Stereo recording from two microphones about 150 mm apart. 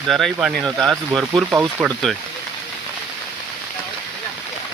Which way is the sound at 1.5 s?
15° right (ahead or behind).